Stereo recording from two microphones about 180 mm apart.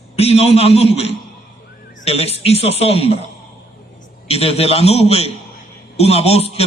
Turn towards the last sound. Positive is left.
turn(degrees=35)  # may be behind; listen again after turning